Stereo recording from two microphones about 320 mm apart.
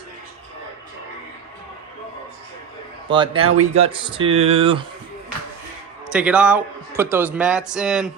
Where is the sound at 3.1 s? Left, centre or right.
Centre.